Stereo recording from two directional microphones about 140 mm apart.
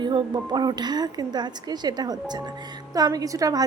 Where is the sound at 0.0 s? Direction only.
30° right (ahead or behind).